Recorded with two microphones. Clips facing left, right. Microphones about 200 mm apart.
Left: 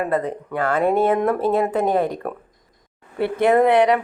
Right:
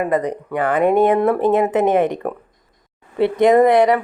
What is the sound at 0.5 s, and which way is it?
Speech, 15° right (ahead or behind).